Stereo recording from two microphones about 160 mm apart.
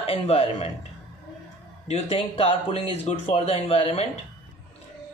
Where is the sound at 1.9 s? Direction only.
45° left (ahead or behind).